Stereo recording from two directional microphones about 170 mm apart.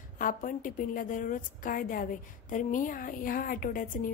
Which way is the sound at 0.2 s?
50° left (ahead or behind).